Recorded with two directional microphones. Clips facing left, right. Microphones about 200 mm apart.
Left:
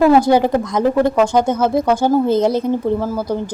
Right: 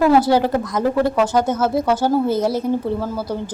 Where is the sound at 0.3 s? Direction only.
15° left (ahead or behind).